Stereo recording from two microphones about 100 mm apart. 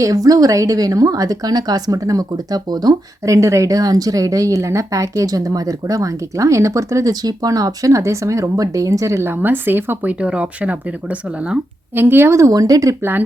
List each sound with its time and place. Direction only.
0.0 s speech: 35° right (ahead or behind); by 11.6 s 10° right (ahead or behind)
11.9 s speech: 20° right (ahead or behind)